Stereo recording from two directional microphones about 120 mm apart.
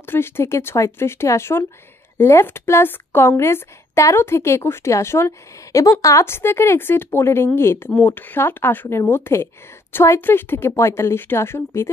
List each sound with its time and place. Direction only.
0.0 s a woman's voice: 20° left (ahead or behind)